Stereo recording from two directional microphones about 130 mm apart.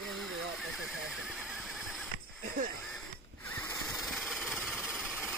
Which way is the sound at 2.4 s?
90° right.